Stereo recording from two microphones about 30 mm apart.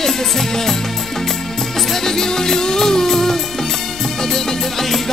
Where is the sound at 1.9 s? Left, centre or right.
Centre.